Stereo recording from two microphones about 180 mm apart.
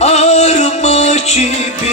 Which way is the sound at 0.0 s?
35° left (ahead or behind).